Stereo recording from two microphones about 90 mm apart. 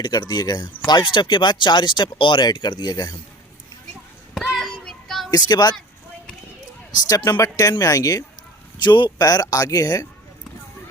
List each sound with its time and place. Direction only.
0.0 s speech: 55° left (ahead or behind)
4.4 s child singing: centre (ahead or behind)
5.3 s speech: 50° left (ahead or behind)
7.3 s speech: 45° left (ahead or behind)
8.8 s speech: 55° left (ahead or behind)